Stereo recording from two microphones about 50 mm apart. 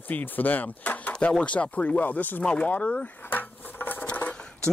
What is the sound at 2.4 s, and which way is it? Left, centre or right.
Speech, left.